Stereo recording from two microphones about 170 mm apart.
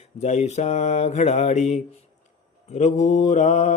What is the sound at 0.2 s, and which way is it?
Mantra, 40° left (ahead or behind).